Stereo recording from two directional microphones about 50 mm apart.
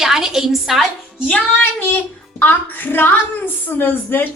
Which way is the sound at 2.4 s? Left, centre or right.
Left.